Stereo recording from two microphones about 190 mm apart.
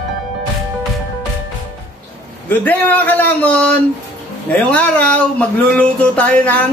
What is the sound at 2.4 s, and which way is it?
A man's voice, 10° left (ahead or behind).